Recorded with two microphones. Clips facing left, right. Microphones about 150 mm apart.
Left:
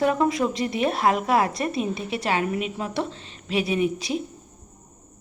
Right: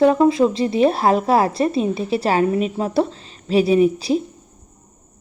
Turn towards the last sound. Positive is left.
turn(degrees=-35)  # may be behind; listen again after turning